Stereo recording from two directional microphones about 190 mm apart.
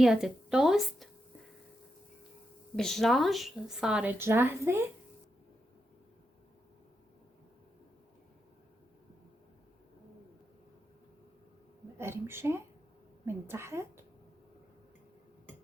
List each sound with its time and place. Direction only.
0.0 s a woman's voice: 5° right (ahead or behind)
2.7 s a woman's voice: centre (ahead or behind); by 4.9 s 15° right (ahead or behind)
11.9 s speech: 15° right (ahead or behind)